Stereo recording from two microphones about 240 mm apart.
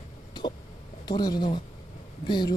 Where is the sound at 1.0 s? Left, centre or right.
Centre.